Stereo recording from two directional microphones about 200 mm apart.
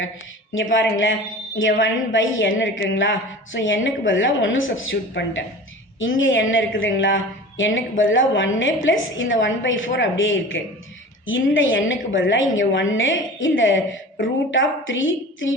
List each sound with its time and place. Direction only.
0.5 s a woman's voice: 70° left (ahead or behind)